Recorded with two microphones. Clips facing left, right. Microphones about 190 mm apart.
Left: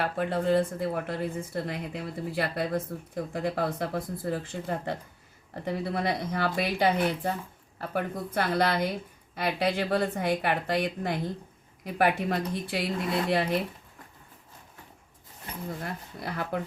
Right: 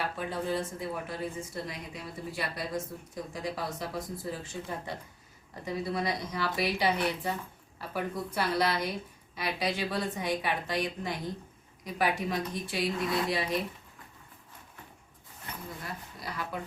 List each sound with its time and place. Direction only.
0.0 s a woman's voice: 60° left (ahead or behind)
15.8 s a woman's voice: 55° left (ahead or behind)